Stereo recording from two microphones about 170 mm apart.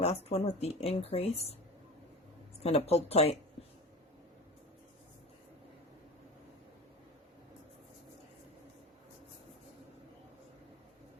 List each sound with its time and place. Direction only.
0.0 s speech: 40° left (ahead or behind)
2.6 s speech: 40° left (ahead or behind)